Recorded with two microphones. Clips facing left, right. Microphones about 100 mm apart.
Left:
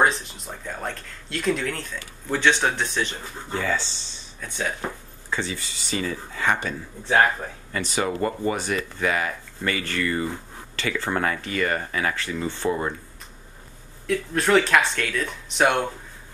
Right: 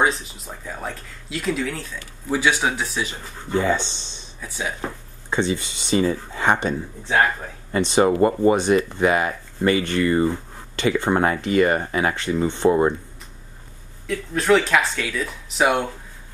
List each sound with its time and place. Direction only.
0.0 s speech: centre (ahead or behind)
3.5 s speech: 20° right (ahead or behind)
4.4 s speech: 5° right (ahead or behind)
5.3 s speech: 20° right (ahead or behind)
7.7 s speech: 25° right (ahead or behind)
14.0 s speech: centre (ahead or behind)